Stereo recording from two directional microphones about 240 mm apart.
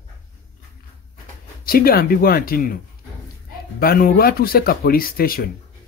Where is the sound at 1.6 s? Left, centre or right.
Left.